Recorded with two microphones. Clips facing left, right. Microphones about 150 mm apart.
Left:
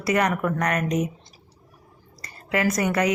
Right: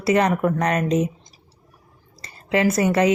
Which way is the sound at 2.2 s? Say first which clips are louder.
Right 4 dB; 25° right (ahead or behind).